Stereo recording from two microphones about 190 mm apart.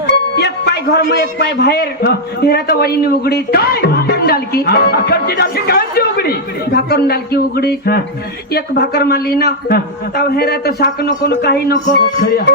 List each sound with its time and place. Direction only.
0.1 s music: 60° left (ahead or behind)
1.2 s a man's voice: 60° left (ahead or behind)